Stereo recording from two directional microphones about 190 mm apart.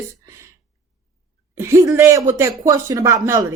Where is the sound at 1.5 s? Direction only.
15° right (ahead or behind).